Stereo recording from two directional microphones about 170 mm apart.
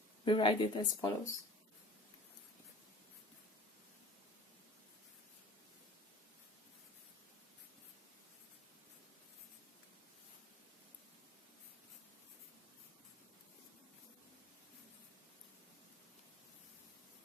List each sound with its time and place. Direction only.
0.3 s speech: 30° left (ahead or behind)